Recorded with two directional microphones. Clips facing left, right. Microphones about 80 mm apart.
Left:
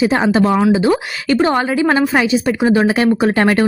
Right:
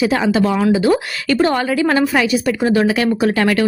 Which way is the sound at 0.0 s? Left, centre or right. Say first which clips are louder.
Left 2 dB; left.